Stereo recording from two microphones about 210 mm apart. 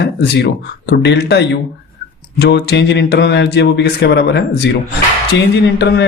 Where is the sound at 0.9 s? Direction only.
50° left (ahead or behind).